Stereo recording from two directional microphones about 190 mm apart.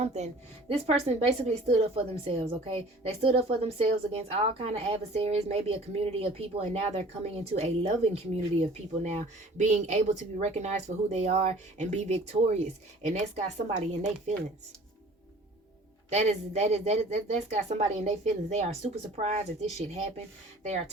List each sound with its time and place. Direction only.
0.0 s a woman's voice: 35° right (ahead or behind)
16.0 s a woman's voice: 35° right (ahead or behind)